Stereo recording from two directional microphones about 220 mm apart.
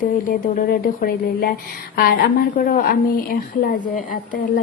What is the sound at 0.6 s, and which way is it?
Speech, 40° left (ahead or behind).